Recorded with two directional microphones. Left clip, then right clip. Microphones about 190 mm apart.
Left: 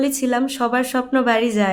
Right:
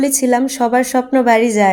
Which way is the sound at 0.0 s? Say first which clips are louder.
Right 5 dB; 15° right (ahead or behind).